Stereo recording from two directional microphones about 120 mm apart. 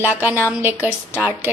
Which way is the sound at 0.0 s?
15° right (ahead or behind).